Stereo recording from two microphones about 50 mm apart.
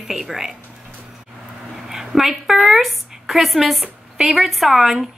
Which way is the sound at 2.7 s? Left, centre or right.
Centre.